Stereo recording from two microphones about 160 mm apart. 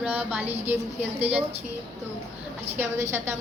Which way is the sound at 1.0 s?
40° right (ahead or behind).